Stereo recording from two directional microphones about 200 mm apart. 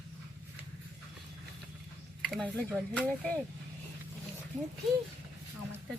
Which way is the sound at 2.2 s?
5° left (ahead or behind).